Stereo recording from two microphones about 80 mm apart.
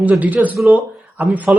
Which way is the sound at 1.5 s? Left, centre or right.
Centre.